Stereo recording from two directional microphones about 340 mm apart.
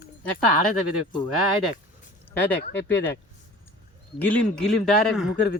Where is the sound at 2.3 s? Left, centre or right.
Centre.